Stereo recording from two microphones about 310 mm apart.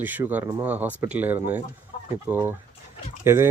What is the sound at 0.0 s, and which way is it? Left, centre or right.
Speech, centre.